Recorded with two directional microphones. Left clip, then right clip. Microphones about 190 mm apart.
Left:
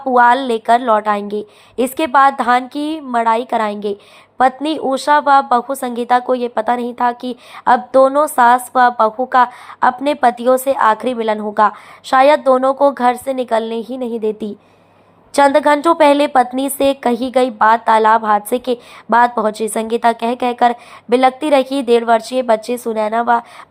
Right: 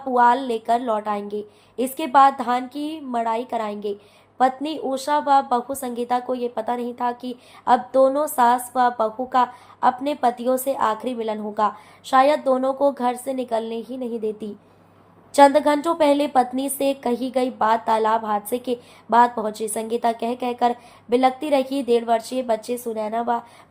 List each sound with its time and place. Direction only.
0.1 s a woman's voice: 35° left (ahead or behind)